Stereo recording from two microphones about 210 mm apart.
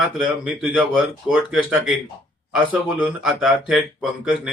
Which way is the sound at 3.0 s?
5° right (ahead or behind).